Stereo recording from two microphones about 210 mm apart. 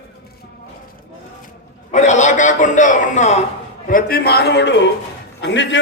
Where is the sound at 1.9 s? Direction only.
35° left (ahead or behind).